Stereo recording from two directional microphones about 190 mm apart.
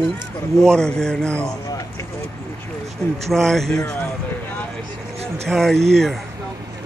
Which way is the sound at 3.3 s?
Centre (ahead or behind).